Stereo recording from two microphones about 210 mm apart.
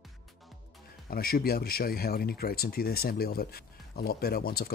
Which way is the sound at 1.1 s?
45° left (ahead or behind).